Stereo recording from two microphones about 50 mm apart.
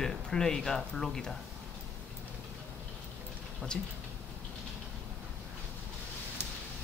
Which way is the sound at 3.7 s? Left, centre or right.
Centre.